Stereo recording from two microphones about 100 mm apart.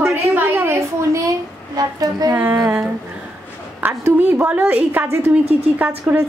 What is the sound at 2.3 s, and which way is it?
Speech, 15° right (ahead or behind).